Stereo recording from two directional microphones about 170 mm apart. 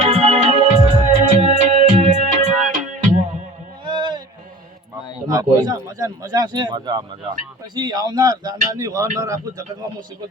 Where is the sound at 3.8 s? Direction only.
25° right (ahead or behind).